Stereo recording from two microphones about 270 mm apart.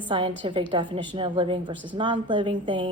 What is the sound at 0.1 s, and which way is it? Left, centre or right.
A woman's voice, centre.